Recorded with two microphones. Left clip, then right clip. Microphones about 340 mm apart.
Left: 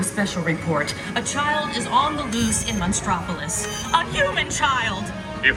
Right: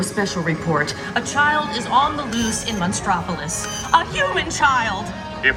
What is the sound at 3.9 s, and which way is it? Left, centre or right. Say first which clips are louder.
A woman's voice: right 3 dB; centre.